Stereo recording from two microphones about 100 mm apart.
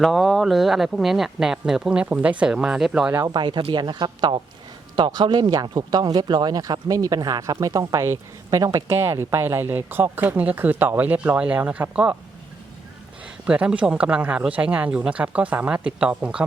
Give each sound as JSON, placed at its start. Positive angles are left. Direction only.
{"t": 0.0, "sound": "speech", "side_deg": 0}
{"t": 3.2, "sound": "speech", "side_deg": -50}
{"t": 13.2, "sound": "speech", "side_deg": -10}